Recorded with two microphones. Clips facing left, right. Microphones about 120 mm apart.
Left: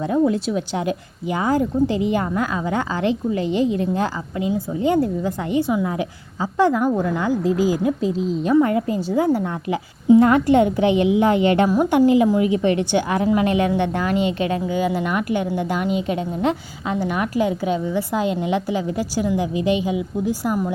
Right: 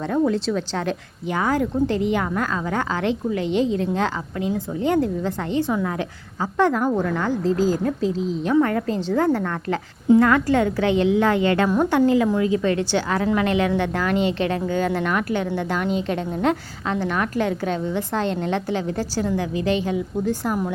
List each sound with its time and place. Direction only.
0.0 s a woman's voice: 10° left (ahead or behind)
3.0 s a woman's voice: 65° right (ahead or behind)
4.4 s a woman's voice: 5° left (ahead or behind)